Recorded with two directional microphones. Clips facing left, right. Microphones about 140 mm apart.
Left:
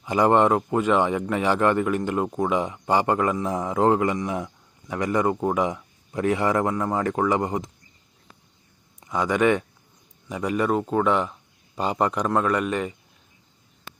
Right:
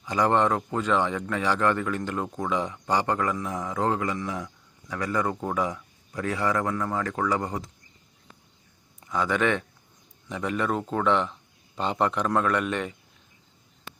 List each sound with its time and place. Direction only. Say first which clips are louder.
0.0 s a man's voice: left 4 dB; 15° left (ahead or behind)
9.0 s speech: left 4 dB; 15° left (ahead or behind)